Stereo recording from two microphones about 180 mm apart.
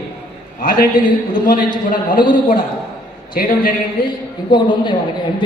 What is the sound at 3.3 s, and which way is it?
Speech, 50° left (ahead or behind).